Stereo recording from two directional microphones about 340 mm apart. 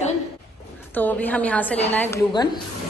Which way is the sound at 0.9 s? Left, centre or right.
Centre.